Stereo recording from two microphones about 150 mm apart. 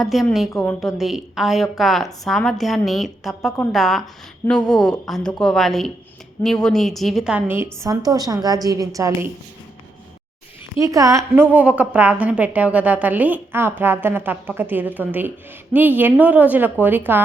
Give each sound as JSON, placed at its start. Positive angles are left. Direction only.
{"t": 0.0, "sound": "a woman's voice", "side_deg": 0}
{"t": 0.5, "sound": "a woman's voice", "side_deg": 10}
{"t": 10.8, "sound": "a woman's voice", "side_deg": -20}